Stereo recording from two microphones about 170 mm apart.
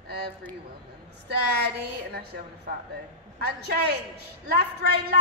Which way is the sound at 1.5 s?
70° right (ahead or behind).